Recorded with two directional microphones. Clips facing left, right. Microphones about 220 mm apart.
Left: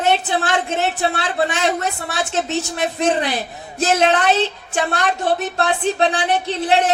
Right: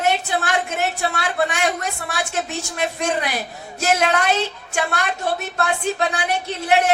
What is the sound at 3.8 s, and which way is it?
Speech, 30° left (ahead or behind).